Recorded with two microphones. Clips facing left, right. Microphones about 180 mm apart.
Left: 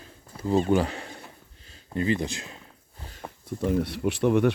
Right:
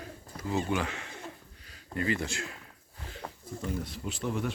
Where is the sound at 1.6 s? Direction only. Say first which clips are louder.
Left 5 dB; 25° left (ahead or behind).